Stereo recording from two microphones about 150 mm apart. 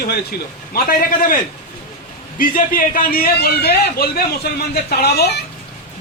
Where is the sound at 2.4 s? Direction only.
70° left (ahead or behind); by 5.3 s 90° left.